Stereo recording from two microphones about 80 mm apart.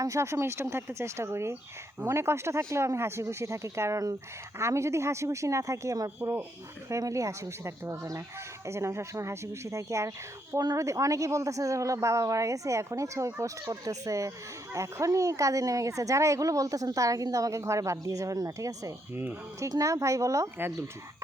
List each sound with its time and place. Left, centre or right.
0.0 s speech: right
19.1 s speech: right
19.8 s speech: right